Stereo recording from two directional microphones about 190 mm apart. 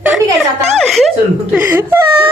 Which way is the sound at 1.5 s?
10° right (ahead or behind).